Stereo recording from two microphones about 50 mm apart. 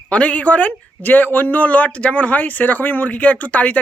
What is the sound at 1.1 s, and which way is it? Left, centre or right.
Speech, left.